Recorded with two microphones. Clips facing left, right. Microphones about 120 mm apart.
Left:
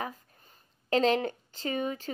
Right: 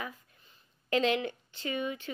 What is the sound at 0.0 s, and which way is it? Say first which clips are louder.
Speech: left 4 dB; 40° left (ahead or behind).